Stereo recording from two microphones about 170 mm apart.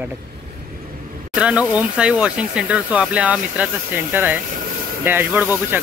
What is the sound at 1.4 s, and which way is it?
Speech, 5° right (ahead or behind).